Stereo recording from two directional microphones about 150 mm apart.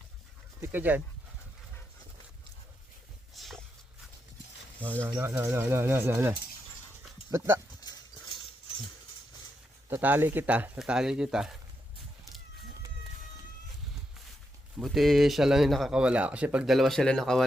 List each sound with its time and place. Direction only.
0.6 s speech: 15° right (ahead or behind)
3.3 s a sound: centre (ahead or behind)
4.8 s speech: 15° right (ahead or behind)
7.8 s livestock: 25° left (ahead or behind)
9.9 s speech: 15° right (ahead or behind)
14.8 s speech: centre (ahead or behind)